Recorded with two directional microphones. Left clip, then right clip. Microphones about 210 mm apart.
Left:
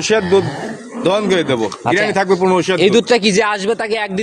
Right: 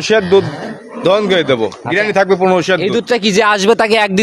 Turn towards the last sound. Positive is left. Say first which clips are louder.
# right 7 dB
turn(degrees=-45)  # may be behind; listen again after turning